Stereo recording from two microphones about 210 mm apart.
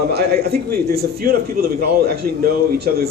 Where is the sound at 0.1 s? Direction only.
50° right (ahead or behind).